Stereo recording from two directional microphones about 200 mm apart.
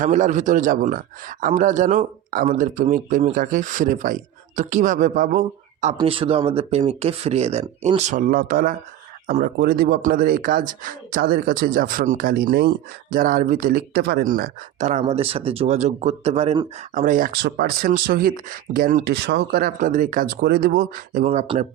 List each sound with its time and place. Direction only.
0.0 s a man's voice: 40° right (ahead or behind)
6.0 s a man's voice: 25° right (ahead or behind)